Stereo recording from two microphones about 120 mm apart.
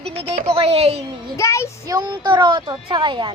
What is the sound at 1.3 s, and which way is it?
Speech, 25° left (ahead or behind).